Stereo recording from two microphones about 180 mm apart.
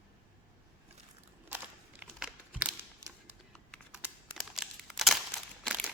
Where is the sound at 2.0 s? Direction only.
5° right (ahead or behind).